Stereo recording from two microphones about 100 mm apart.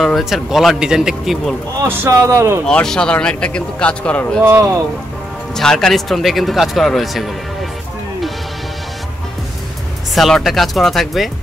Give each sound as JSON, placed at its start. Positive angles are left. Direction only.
{"t": 0.0, "sound": "speech", "side_deg": 0}
{"t": 1.8, "sound": "speech", "side_deg": -25}
{"t": 2.6, "sound": "a man's voice", "side_deg": 5}
{"t": 4.4, "sound": "speech", "side_deg": -25}
{"t": 5.6, "sound": "speech", "side_deg": 5}
{"t": 10.1, "sound": "speech", "side_deg": 0}